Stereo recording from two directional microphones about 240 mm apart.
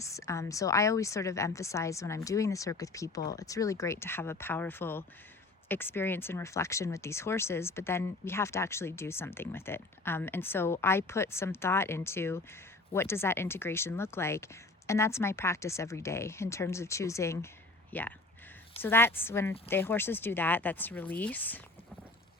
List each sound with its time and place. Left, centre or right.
0.0 s speech: centre